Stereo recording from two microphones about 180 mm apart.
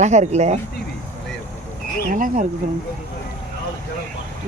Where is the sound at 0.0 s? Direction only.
40° right (ahead or behind).